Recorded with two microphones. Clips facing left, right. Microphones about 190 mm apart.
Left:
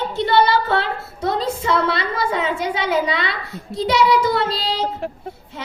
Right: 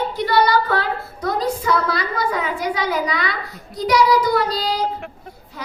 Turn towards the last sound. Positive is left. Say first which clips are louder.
# even
turn(degrees=25)  # may be behind; listen again after turning